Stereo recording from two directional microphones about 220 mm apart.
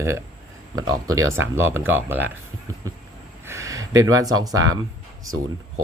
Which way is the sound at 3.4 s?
15° right (ahead or behind).